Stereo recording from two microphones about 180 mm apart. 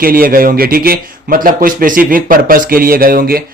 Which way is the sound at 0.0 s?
55° right (ahead or behind).